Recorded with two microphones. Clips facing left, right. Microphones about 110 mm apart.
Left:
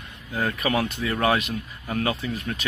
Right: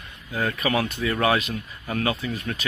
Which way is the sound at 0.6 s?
15° left (ahead or behind).